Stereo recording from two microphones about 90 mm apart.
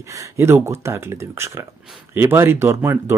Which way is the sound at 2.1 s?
25° right (ahead or behind).